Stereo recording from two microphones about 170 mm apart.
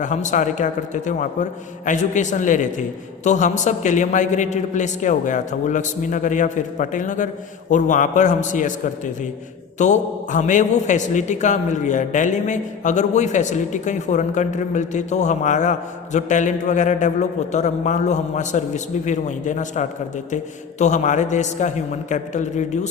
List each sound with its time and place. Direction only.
0.0 s a man's voice: 45° left (ahead or behind)
9.7 s a man's voice: 45° left (ahead or behind)